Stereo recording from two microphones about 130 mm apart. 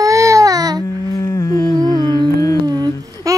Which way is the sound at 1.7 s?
30° right (ahead or behind).